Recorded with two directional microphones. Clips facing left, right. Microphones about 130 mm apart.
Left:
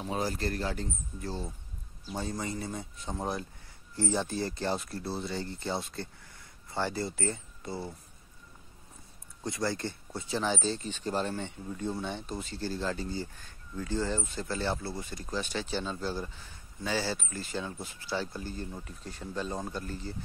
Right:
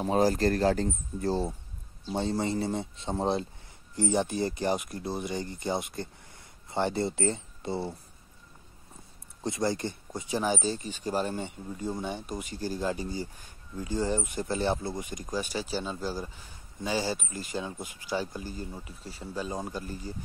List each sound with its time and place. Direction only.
0.0 s speech: 40° right (ahead or behind)
2.0 s speech: 25° right (ahead or behind)
9.4 s speech: 20° right (ahead or behind)